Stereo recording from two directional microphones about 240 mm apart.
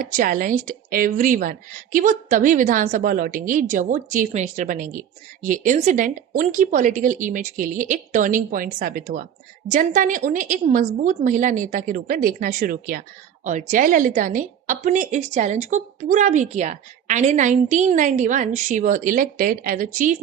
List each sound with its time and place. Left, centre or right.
0.0 s a woman's voice: right